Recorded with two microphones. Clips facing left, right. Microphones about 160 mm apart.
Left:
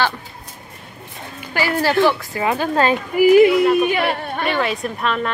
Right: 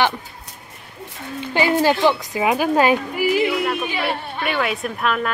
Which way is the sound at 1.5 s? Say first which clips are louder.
Right 2 dB; 20° right (ahead or behind).